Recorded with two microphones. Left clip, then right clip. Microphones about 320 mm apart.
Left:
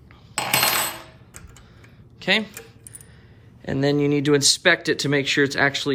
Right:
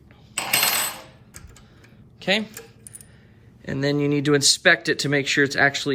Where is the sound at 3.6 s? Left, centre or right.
Centre.